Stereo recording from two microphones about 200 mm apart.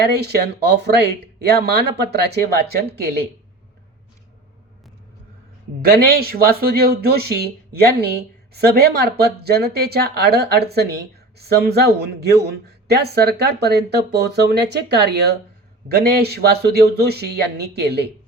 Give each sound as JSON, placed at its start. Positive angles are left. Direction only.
{"t": 0.0, "sound": "speech", "side_deg": -55}
{"t": 5.8, "sound": "speech", "side_deg": -50}